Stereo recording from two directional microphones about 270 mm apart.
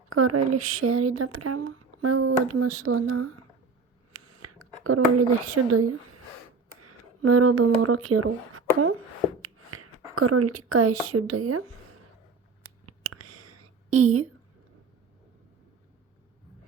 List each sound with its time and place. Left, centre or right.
0.1 s speech: right
0.5 s a sound: right
6.7 s speech: right
12.8 s whispering: right